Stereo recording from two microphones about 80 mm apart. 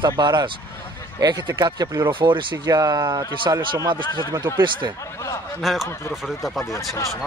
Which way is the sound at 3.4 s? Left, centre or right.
Right.